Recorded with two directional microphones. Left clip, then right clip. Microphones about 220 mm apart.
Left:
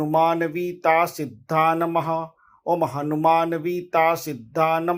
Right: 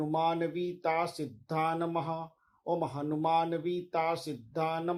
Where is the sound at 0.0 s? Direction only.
15° left (ahead or behind).